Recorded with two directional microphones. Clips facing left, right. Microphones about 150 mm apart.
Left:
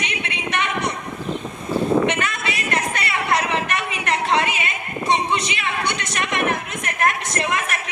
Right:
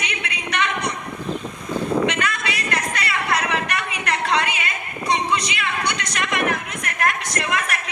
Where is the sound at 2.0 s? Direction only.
25° left (ahead or behind).